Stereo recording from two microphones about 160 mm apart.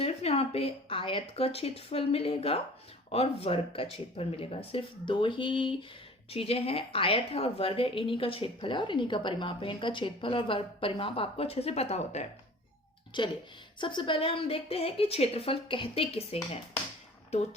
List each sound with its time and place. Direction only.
0.0 s a woman's voice: 40° left (ahead or behind)
13.1 s a woman's voice: 30° left (ahead or behind)